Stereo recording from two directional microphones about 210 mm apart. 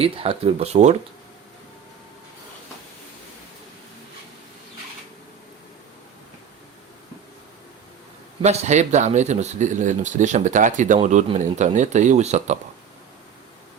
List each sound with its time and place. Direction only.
0.0 s speech: 30° right (ahead or behind)
8.4 s speech: 30° right (ahead or behind)